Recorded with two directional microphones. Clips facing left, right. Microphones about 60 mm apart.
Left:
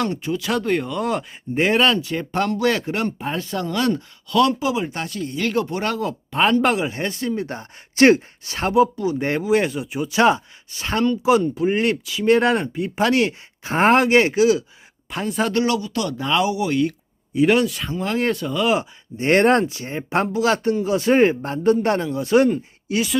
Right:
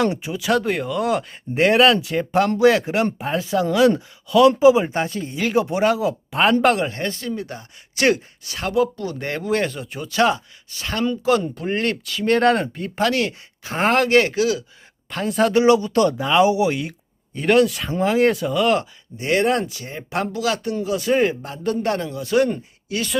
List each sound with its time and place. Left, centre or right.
0.0 s speech: centre
5.4 s speech: centre
6.9 s speech: left
11.2 s speech: centre
13.0 s speech: left
15.1 s speech: centre
15.5 s speech: right
15.9 s speech: right
16.1 s speech: centre
16.4 s speech: right
17.3 s speech: centre
19.1 s speech: left
19.6 s speech: left